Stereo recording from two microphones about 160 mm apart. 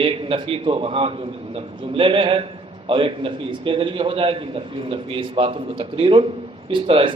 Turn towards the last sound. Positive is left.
turn(degrees=-35)  # may be behind; listen again after turning